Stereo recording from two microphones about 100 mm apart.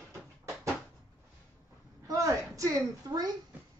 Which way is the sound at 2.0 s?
35° right (ahead or behind).